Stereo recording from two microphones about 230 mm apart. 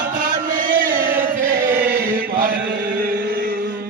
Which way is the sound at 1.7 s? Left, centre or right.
Centre.